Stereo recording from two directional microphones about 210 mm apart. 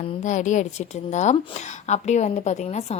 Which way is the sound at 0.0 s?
35° left (ahead or behind).